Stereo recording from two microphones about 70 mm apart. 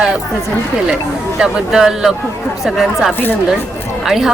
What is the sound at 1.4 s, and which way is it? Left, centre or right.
A woman's voice, centre.